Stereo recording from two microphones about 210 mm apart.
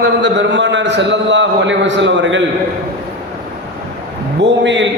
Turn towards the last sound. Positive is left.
turn(degrees=-60)  # may be behind; listen again after turning